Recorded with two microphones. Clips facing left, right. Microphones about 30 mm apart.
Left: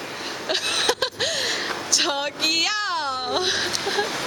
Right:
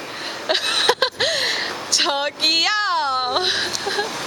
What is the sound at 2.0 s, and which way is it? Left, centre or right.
Speech, centre.